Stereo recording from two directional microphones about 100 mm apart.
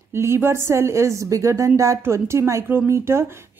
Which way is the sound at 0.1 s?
25° right (ahead or behind).